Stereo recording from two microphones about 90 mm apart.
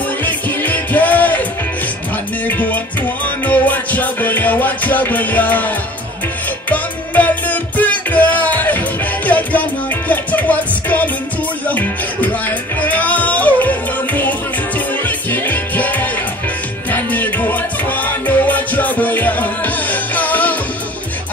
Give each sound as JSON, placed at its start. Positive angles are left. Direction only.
{"t": 0.2, "sound": "music", "side_deg": 20}
{"t": 2.4, "sound": "music", "side_deg": 20}
{"t": 6.7, "sound": "music", "side_deg": 20}